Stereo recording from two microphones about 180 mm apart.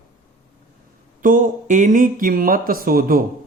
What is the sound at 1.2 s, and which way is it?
Speech, 50° right (ahead or behind).